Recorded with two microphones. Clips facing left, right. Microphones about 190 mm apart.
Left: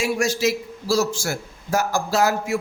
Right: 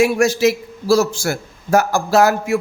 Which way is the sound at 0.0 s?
60° right (ahead or behind).